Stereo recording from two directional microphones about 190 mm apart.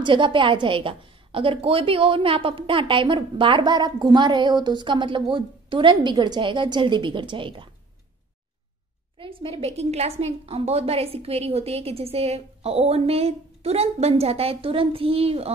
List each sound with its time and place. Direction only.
0.0 s a woman's voice: 25° right (ahead or behind)
9.2 s a woman's voice: 25° right (ahead or behind)